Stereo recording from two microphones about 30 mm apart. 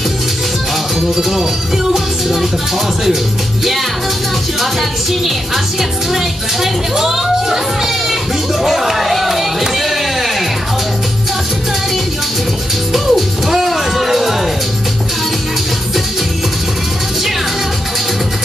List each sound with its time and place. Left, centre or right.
6.1 s speech: centre
12.9 s music: centre